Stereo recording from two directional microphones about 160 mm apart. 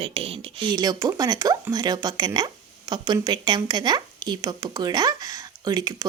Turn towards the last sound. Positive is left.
turn(degrees=-25)  # may be behind; listen again after turning